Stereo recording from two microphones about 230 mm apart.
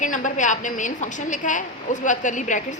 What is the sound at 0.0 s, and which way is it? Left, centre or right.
A woman's voice, left.